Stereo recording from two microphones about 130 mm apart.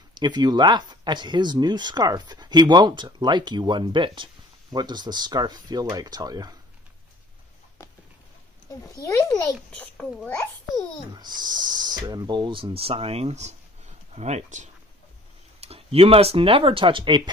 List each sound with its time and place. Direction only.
0.1 s speech: 35° right (ahead or behind)
9.5 s a child's voice: 10° left (ahead or behind)
11.1 s speech: 35° right (ahead or behind); by 14.7 s 65° right (ahead or behind)
15.6 s speech: 50° right (ahead or behind)